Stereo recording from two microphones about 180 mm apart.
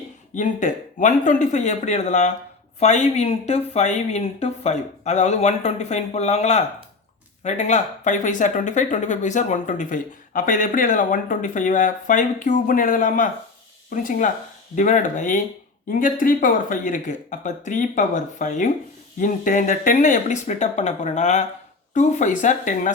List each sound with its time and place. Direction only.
0.3 s speech: 45° left (ahead or behind)